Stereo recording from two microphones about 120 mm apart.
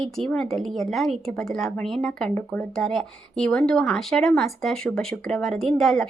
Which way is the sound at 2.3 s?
15° left (ahead or behind).